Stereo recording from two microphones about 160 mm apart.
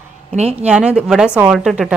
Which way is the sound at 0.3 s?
40° right (ahead or behind).